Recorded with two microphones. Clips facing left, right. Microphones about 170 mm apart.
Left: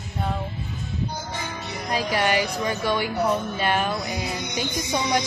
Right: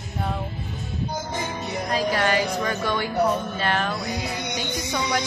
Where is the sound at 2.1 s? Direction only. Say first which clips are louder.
Left 3 dB; 15° left (ahead or behind).